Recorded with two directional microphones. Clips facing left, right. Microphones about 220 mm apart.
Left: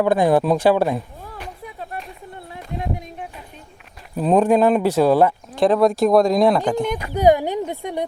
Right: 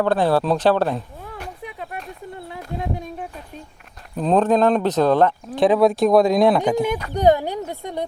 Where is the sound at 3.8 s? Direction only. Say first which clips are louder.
Left 2 dB; 5° left (ahead or behind).